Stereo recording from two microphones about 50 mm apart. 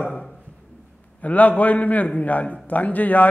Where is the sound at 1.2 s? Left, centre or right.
Left.